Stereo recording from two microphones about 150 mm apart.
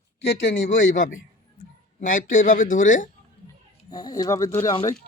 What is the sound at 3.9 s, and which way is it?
Speech, 25° left (ahead or behind).